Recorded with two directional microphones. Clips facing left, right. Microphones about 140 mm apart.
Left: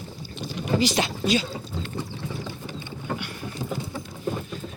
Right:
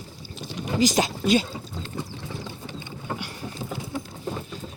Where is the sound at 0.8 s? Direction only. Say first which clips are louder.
Right 7 dB; 45° right (ahead or behind).